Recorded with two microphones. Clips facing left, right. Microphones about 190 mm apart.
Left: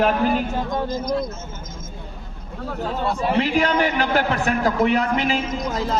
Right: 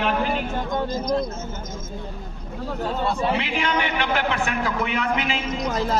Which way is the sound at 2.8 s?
Centre (ahead or behind).